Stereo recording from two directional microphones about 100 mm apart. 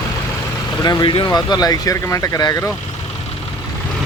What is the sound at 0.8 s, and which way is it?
Speech, 50° left (ahead or behind).